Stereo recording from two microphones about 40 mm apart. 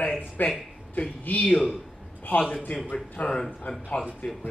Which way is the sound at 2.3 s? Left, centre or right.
Left.